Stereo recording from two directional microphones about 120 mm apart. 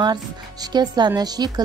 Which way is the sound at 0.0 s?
35° right (ahead or behind).